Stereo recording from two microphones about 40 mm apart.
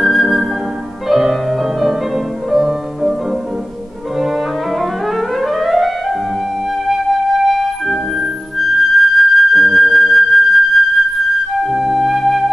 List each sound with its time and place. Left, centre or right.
0.0 s music: centre
6.9 s flute: centre